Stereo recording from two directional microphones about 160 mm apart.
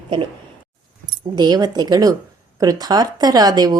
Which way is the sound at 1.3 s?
25° right (ahead or behind).